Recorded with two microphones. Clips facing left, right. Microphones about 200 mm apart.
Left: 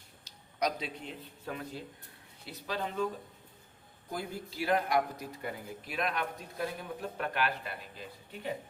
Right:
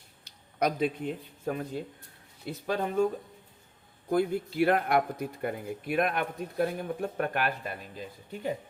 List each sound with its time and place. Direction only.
0.3 s speech: 55° right (ahead or behind)
4.1 s speech: 60° right (ahead or behind)